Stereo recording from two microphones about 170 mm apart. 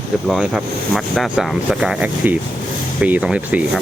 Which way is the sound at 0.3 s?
Centre (ahead or behind).